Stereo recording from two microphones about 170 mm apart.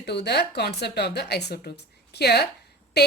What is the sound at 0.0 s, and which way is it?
Speech, 80° left.